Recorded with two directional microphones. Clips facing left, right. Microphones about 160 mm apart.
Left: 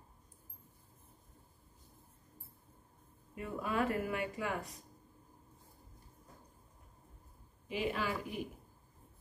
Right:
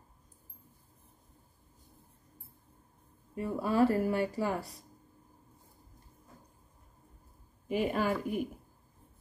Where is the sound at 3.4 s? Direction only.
35° right (ahead or behind).